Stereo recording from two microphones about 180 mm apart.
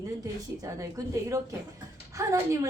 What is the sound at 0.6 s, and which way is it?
A woman's voice, 20° right (ahead or behind).